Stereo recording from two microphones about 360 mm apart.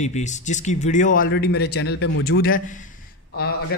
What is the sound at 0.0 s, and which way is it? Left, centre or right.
Speech, centre.